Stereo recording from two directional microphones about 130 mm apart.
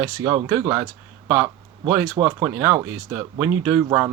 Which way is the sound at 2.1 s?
30° right (ahead or behind).